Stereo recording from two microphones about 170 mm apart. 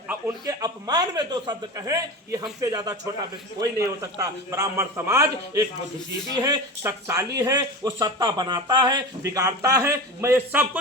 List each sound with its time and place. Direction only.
0.1 s a man's voice: 20° right (ahead or behind)